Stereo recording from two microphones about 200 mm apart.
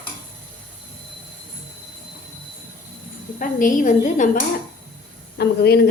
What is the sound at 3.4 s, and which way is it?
Speech, 40° left (ahead or behind).